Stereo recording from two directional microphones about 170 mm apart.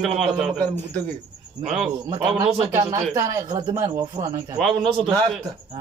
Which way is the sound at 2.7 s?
15° right (ahead or behind).